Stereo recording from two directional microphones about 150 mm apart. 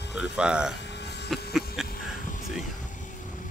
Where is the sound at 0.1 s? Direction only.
5° right (ahead or behind).